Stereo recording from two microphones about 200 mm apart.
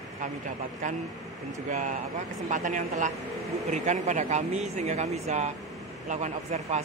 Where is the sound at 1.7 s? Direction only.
40° right (ahead or behind).